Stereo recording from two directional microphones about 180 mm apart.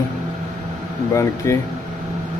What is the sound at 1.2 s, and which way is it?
Speech, 15° left (ahead or behind).